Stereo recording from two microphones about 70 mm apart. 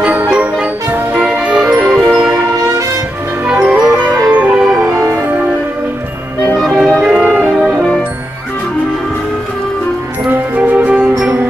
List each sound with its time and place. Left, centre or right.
0.0 s music: right
3.4 s music: centre
4.7 s music: right
6.6 s music: centre
7.0 s music: centre
7.4 s music: right
10.3 s music: right